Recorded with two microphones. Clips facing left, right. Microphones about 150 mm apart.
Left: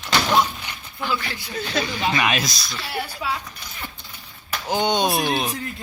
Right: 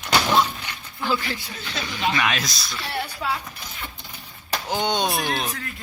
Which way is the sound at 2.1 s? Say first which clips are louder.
Left 4 dB; 10° left (ahead or behind).